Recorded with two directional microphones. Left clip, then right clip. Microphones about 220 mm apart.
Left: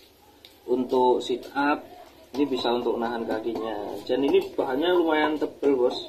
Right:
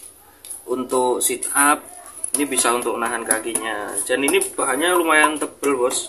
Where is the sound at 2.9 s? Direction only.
15° right (ahead or behind).